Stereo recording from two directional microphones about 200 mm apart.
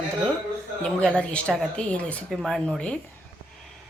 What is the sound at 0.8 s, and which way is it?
Speech, 5° left (ahead or behind).